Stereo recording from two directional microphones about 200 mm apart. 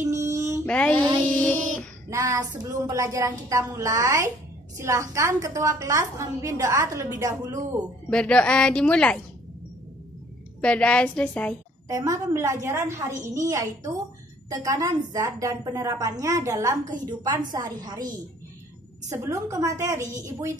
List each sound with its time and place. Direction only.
0.0 s a sound: 15° right (ahead or behind)
0.7 s mantra: 5° left (ahead or behind)
1.3 s child singing: 5° left (ahead or behind)
2.0 s a woman's voice: 15° right (ahead or behind)
8.1 s a woman's voice: 5° left (ahead or behind)
10.6 s a woman's voice: 5° left (ahead or behind)
11.9 s a woman's voice: 15° right (ahead or behind)